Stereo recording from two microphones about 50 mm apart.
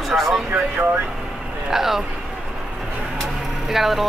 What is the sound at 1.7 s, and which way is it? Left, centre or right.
Speech, centre.